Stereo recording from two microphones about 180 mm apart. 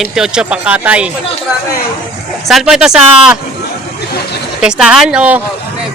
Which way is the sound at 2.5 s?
Centre (ahead or behind).